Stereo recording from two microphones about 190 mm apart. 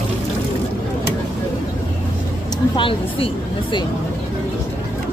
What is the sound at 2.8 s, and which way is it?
Speech, 30° left (ahead or behind).